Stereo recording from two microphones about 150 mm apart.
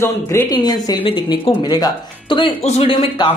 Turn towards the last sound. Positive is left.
turn(degrees=35)  # may be behind; listen again after turning